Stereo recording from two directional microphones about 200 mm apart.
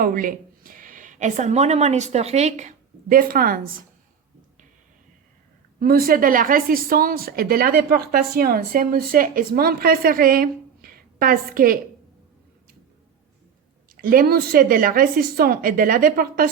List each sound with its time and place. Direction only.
0.0 s speech: 45° right (ahead or behind)
5.8 s speech: 45° right (ahead or behind)
13.9 s speech: 45° right (ahead or behind)